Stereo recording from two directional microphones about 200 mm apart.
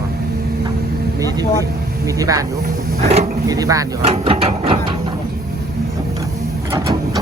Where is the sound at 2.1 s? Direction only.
15° right (ahead or behind).